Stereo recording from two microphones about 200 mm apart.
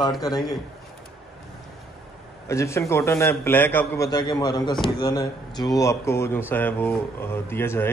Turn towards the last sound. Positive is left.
turn(degrees=10)  # may be behind; listen again after turning